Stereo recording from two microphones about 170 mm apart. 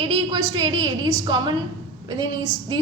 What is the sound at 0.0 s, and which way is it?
A woman's voice, 30° right (ahead or behind).